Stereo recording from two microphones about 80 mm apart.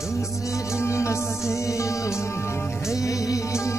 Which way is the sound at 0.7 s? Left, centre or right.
Left.